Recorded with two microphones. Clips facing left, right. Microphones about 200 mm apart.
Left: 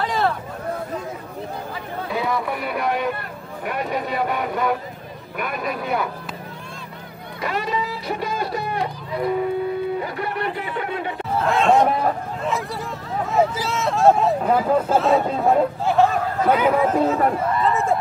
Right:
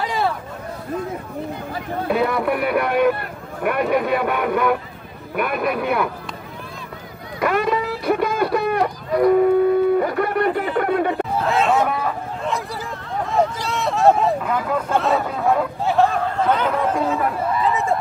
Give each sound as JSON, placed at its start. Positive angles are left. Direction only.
{"t": 0.0, "sound": "a sound", "side_deg": -10}
{"t": 2.0, "sound": "speech", "side_deg": -60}
{"t": 7.3, "sound": "a sound", "side_deg": -55}
{"t": 9.9, "sound": "speech", "side_deg": -50}
{"t": 11.3, "sound": "a man's voice", "side_deg": 0}
{"t": 11.8, "sound": "speech", "side_deg": 35}
{"t": 13.2, "sound": "a man's voice", "side_deg": 5}
{"t": 14.4, "sound": "speech", "side_deg": 35}
{"t": 14.9, "sound": "a man's voice", "side_deg": 0}